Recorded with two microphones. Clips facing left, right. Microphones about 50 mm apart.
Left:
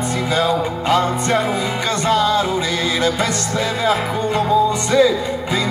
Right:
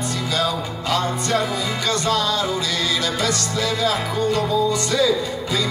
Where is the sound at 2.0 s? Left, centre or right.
Left.